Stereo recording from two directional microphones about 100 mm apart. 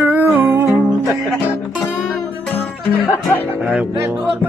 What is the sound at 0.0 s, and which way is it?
Music, 20° right (ahead or behind).